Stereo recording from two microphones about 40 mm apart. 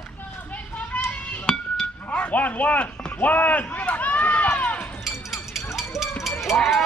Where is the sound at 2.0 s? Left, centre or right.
Left.